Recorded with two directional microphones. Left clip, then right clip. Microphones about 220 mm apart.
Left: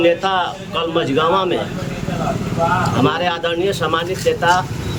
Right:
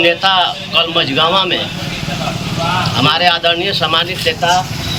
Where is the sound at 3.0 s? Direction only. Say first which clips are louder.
Right 6 dB; 10° left (ahead or behind).